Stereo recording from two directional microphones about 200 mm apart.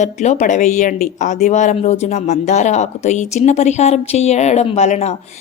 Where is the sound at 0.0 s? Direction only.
35° left (ahead or behind).